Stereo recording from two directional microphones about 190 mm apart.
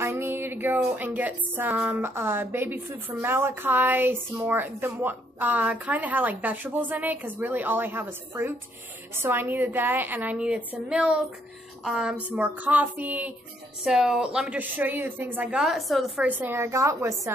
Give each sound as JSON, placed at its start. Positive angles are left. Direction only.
{"t": 0.0, "sound": "a woman's voice", "side_deg": -10}